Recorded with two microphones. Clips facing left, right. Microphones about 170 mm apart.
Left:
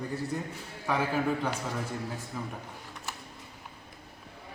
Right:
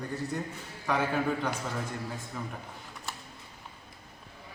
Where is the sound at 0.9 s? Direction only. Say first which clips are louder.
Even; 5° left (ahead or behind).